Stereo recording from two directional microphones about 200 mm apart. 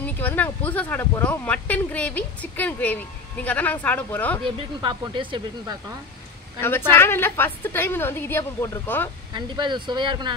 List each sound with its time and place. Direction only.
0.0 s speech: 10° left (ahead or behind)
4.5 s speech: 20° right (ahead or behind)
6.9 s speech: 10° left (ahead or behind)
9.3 s speech: 25° right (ahead or behind)